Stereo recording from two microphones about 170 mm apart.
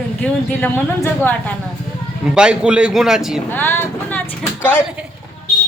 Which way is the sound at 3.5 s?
10° left (ahead or behind).